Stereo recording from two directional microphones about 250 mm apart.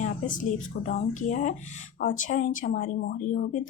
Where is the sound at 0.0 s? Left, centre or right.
Left.